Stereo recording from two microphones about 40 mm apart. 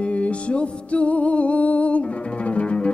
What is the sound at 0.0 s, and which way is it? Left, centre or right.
Music, left.